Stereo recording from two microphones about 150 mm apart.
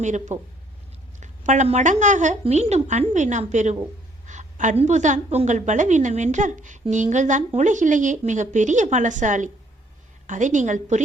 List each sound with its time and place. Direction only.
0.0 s a woman's voice: 55° right (ahead or behind)